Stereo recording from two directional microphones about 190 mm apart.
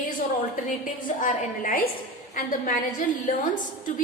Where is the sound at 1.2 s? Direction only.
45° left (ahead or behind).